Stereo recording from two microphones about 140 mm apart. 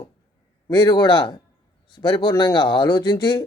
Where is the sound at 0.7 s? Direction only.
35° left (ahead or behind).